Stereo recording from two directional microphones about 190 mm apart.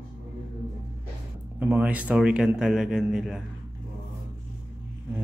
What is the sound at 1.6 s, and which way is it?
Speech, 10° right (ahead or behind).